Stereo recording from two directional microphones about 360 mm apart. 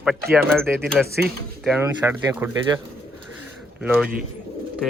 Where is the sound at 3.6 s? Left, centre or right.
Centre.